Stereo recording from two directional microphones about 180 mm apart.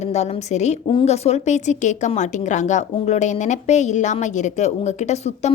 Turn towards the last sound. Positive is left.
turn(degrees=35)  # may be behind; listen again after turning